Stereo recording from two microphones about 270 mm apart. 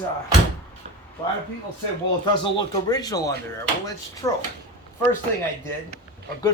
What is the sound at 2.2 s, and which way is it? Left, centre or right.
Speech, centre.